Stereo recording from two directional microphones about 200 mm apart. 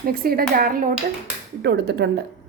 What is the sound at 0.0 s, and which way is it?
A woman's voice, 45° right (ahead or behind).